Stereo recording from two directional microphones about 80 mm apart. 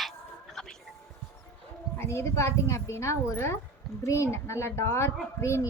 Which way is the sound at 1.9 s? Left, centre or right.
Left.